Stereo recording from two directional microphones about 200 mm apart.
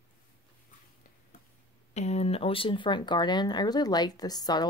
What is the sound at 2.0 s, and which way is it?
Speech, 35° left (ahead or behind).